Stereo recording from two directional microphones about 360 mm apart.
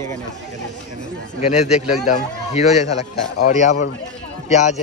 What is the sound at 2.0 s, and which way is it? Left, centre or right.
A man's voice, centre.